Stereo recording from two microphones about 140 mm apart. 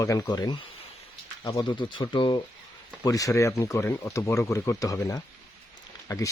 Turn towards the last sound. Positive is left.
turn(degrees=20)  # may be behind; listen again after turning